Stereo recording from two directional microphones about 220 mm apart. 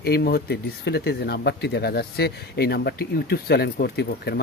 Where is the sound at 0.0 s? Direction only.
45° left (ahead or behind).